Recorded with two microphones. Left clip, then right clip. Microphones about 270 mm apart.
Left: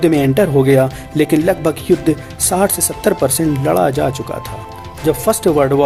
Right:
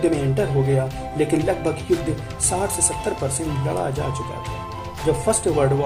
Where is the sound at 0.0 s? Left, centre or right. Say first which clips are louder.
Left 8 dB; left.